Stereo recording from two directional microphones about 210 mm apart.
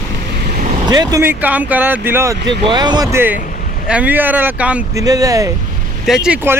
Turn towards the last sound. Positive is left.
turn(degrees=-5)  # may be behind; listen again after turning